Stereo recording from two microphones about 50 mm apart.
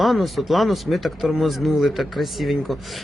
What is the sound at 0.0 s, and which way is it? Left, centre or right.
Speech, centre.